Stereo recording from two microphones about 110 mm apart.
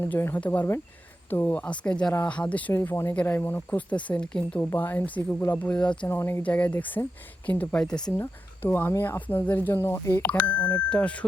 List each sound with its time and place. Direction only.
0.0 s speech: 20° left (ahead or behind)
6.1 s speech: 20° left (ahead or behind); by 8.1 s 5° left (ahead or behind)
8.1 s speech: 20° left (ahead or behind)